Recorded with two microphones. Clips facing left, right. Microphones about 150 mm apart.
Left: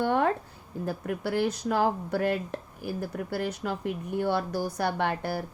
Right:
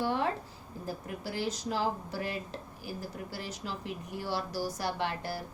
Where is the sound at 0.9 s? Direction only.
60° left (ahead or behind).